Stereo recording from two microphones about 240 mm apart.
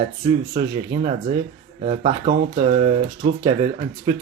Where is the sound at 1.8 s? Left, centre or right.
Right.